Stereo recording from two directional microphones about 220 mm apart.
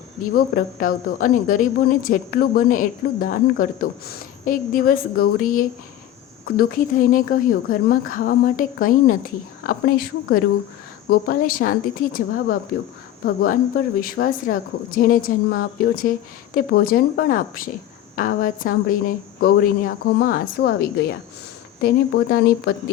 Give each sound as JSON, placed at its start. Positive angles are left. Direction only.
{"t": 0.2, "sound": "a woman's voice", "side_deg": 40}